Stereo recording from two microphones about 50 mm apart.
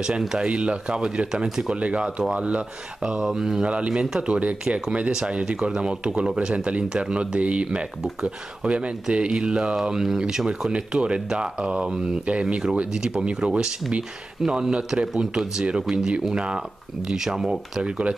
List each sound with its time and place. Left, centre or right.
0.4 s speech: right
3.6 s speech: right
5.1 s speech: centre